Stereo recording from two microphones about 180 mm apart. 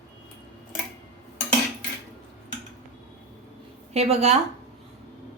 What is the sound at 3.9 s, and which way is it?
Speech, 35° right (ahead or behind).